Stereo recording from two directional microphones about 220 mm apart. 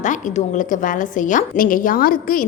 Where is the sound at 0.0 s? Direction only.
35° left (ahead or behind).